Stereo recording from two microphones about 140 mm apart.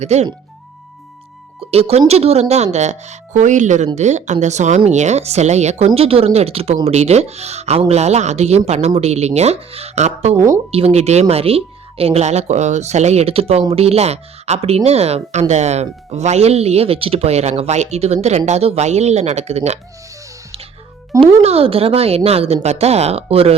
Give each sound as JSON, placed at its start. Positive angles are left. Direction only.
{"t": 0.0, "sound": "speech", "side_deg": -50}
{"t": 1.7, "sound": "speech", "side_deg": -45}
{"t": 10.3, "sound": "speech", "side_deg": -20}
{"t": 10.7, "sound": "speech", "side_deg": -45}
{"t": 21.4, "sound": "speech", "side_deg": -45}